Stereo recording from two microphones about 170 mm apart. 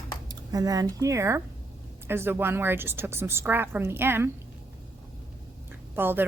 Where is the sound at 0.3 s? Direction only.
20° right (ahead or behind).